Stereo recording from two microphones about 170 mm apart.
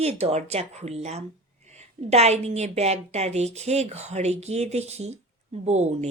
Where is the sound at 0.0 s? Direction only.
35° right (ahead or behind).